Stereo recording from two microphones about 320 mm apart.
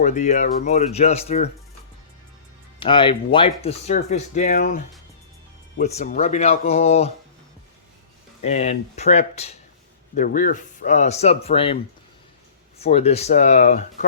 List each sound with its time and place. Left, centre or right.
0.0 s speech: left
2.8 s speech: centre
5.8 s speech: left
8.4 s speech: left
12.8 s speech: centre